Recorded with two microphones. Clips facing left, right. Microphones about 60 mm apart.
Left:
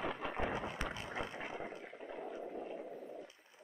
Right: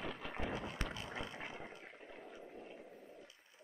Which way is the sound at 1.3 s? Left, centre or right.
Left.